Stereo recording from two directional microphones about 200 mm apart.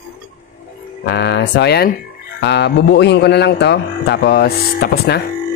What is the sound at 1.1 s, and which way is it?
Speech, 60° left (ahead or behind).